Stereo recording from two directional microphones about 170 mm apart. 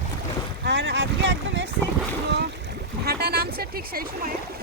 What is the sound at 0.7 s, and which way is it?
Speech, 90° right.